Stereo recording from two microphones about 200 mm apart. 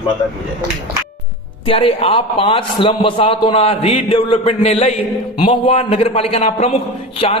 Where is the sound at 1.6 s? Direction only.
25° left (ahead or behind).